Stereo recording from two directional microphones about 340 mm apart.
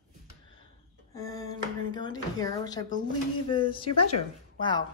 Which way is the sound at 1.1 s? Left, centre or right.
Centre.